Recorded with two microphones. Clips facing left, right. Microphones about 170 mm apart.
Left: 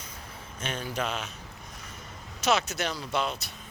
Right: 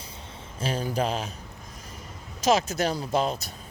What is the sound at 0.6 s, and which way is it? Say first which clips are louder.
Speech: right 5 dB; 35° right (ahead or behind).